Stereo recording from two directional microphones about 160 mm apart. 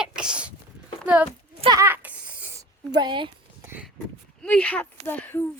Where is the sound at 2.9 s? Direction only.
30° right (ahead or behind).